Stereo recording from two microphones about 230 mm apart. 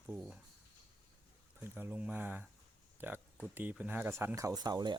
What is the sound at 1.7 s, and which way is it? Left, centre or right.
Speech, centre.